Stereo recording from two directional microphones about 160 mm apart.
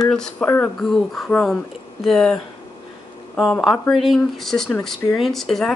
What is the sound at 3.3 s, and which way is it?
Speech, centre (ahead or behind).